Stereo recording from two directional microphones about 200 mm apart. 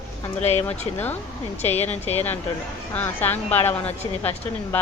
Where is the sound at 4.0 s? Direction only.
30° left (ahead or behind).